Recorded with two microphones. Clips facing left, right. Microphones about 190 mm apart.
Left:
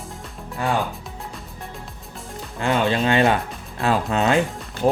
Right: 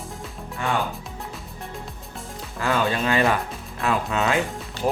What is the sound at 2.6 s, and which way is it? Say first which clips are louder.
Speech: left 3 dB; 25° left (ahead or behind).